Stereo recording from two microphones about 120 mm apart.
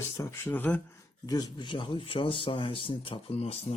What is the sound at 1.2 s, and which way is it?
Speech, 30° left (ahead or behind).